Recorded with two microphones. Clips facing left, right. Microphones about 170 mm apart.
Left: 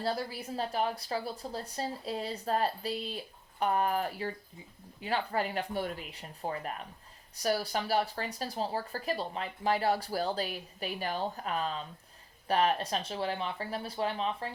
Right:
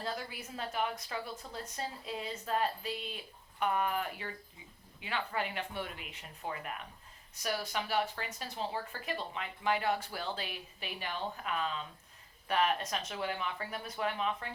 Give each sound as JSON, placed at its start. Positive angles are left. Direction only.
{"t": 0.0, "sound": "speech", "side_deg": 35}